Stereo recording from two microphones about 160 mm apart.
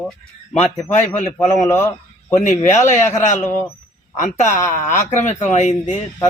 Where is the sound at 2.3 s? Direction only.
50° left (ahead or behind).